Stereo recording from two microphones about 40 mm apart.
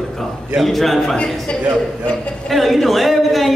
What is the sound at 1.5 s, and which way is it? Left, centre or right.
Speech, left.